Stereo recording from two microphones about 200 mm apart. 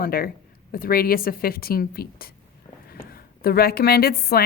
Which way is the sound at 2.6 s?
30° left (ahead or behind).